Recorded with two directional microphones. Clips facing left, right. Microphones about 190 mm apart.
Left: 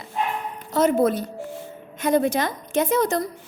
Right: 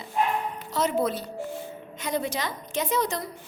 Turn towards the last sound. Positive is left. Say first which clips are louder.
# left 6 dB
turn(degrees=50)  # may be behind; listen again after turning